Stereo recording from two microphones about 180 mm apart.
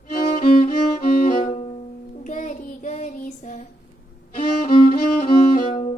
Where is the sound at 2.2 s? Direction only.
45° left (ahead or behind).